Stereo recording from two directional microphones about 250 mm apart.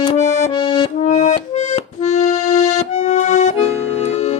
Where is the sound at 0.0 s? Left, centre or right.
Left.